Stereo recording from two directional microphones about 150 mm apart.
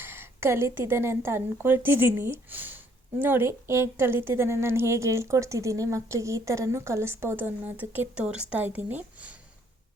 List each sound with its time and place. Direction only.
0.0 s a woman's voice: 15° right (ahead or behind)